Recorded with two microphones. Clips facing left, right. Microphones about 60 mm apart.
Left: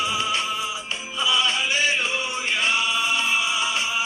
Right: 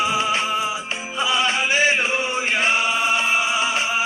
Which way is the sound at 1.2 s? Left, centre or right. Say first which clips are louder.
Right 2 dB; right.